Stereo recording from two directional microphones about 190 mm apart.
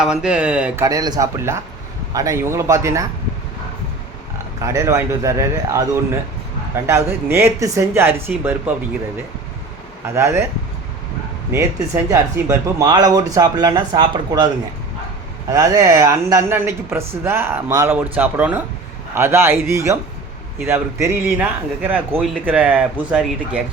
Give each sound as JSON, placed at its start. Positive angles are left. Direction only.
{"t": 0.0, "sound": "speech", "side_deg": -5}
{"t": 0.9, "sound": "speech", "side_deg": -20}
{"t": 4.6, "sound": "speech", "side_deg": -15}
{"t": 10.2, "sound": "speech", "side_deg": -15}
{"t": 11.5, "sound": "speech", "side_deg": -15}